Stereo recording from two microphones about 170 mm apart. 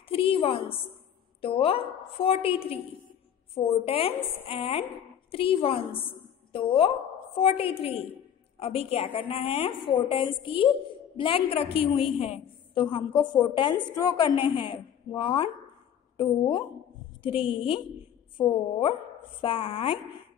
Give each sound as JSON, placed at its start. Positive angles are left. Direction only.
{"t": 0.1, "sound": "a woman's voice", "side_deg": 35}